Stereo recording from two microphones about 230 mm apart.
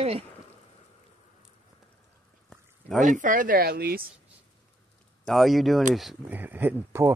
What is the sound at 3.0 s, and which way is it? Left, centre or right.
Speech, right.